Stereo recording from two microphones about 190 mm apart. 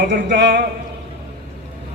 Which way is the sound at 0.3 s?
70° right (ahead or behind).